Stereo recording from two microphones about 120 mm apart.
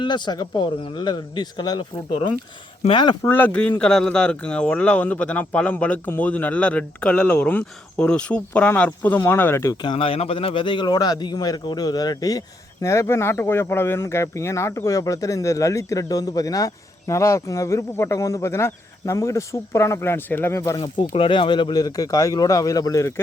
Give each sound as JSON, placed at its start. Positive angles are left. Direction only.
{"t": 0.0, "sound": "a man's voice", "side_deg": 40}
{"t": 2.9, "sound": "a man's voice", "side_deg": 40}
{"t": 3.2, "sound": "speech", "side_deg": 15}
{"t": 9.8, "sound": "a man's voice", "side_deg": 50}
{"t": 20.7, "sound": "a man's voice", "side_deg": 40}